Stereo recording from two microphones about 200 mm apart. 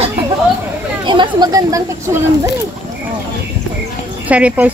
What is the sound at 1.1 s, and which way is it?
A woman's voice, 20° right (ahead or behind).